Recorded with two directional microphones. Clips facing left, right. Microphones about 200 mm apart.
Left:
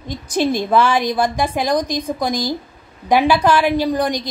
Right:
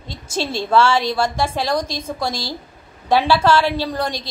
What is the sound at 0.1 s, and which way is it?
A woman's voice, 15° left (ahead or behind).